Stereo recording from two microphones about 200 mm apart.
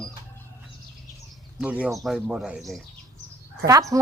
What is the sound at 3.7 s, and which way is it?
Speech, 15° right (ahead or behind).